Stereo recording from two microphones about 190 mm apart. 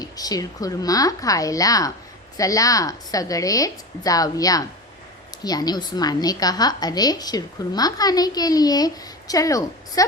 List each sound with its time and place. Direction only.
0.0 s a woman's voice: 20° left (ahead or behind)